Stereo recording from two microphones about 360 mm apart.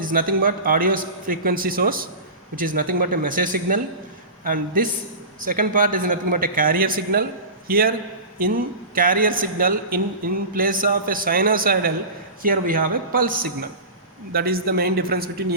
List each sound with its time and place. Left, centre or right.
0.0 s a man's voice: right